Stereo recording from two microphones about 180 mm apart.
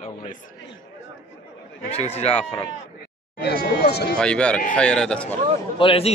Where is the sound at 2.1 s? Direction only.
35° left (ahead or behind).